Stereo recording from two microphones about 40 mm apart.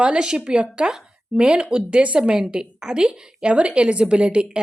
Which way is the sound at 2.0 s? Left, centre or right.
Right.